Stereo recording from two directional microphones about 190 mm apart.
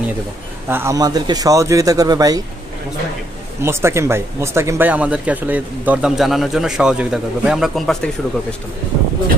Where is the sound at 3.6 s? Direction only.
15° right (ahead or behind).